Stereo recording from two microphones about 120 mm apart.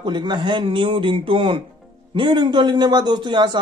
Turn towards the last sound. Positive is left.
turn(degrees=-40)  # may be behind; listen again after turning